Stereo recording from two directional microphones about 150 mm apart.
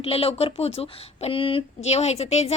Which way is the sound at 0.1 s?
40° left (ahead or behind).